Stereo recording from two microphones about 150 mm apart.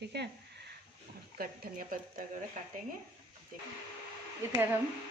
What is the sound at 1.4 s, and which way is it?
Speech, 75° right (ahead or behind).